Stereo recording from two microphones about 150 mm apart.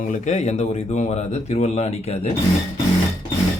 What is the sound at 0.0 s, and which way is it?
Speech, 55° left (ahead or behind).